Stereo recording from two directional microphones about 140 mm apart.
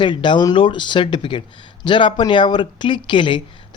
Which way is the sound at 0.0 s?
35° left (ahead or behind).